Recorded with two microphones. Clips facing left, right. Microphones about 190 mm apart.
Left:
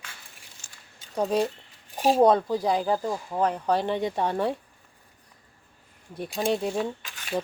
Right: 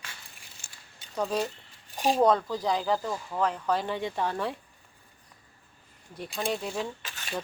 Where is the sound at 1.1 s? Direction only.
30° left (ahead or behind).